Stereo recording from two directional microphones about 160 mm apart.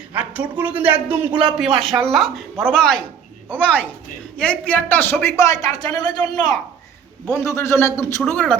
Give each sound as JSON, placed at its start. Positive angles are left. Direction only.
{"t": 0.1, "sound": "a man's voice", "side_deg": -10}